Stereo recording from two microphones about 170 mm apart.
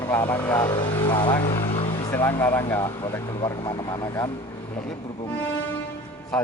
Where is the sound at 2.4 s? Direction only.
10° left (ahead or behind).